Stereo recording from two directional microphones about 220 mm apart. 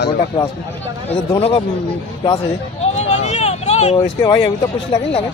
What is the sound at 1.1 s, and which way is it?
Speech, 25° left (ahead or behind).